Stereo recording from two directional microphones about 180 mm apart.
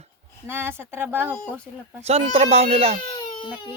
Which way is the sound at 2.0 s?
35° right (ahead or behind).